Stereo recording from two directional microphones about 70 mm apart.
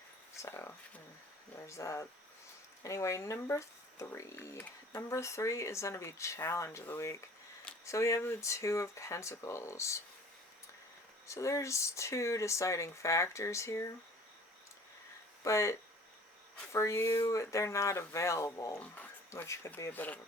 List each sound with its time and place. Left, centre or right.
0.4 s speech: left
3.5 s speech: left
4.5 s speech: left
4.9 s speech: left
11.3 s speech: left
15.4 s speech: left
19.9 s speech: left